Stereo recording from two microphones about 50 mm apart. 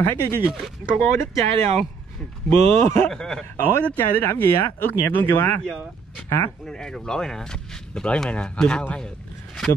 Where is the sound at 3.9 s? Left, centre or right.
Left.